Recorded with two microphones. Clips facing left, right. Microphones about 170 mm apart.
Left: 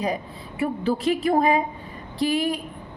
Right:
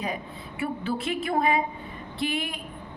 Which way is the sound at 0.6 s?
35° left (ahead or behind).